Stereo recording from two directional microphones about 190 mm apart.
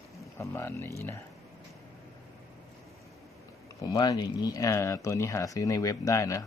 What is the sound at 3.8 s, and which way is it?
Speech, 20° left (ahead or behind).